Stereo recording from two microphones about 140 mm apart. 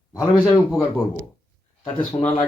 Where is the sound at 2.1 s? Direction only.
20° left (ahead or behind).